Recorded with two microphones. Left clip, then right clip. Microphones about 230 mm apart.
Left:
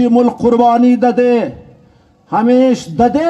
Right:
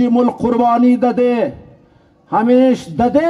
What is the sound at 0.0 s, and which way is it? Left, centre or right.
A man's voice, left.